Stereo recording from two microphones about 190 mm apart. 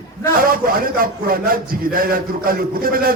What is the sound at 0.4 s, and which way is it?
A man's voice, 50° right (ahead or behind).